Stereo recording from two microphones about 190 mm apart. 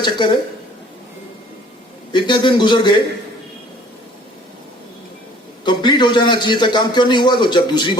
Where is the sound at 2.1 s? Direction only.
25° left (ahead or behind).